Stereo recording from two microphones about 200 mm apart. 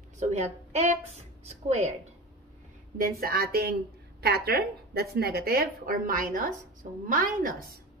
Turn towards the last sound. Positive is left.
turn(degrees=-45)  # may be behind; listen again after turning